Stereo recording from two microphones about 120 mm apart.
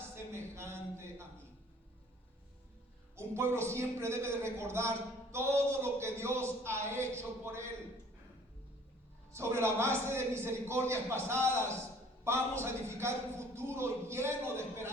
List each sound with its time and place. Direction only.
0.3 s a sound: 20° right (ahead or behind)
3.2 s a man's voice: 20° right (ahead or behind)
9.3 s a man's voice: 20° right (ahead or behind)